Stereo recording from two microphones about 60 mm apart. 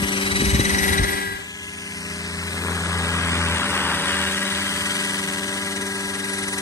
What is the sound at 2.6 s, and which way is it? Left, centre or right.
Vehicle, left.